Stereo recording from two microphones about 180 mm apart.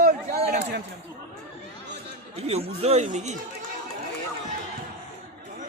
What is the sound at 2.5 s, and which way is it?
Speech, 35° right (ahead or behind).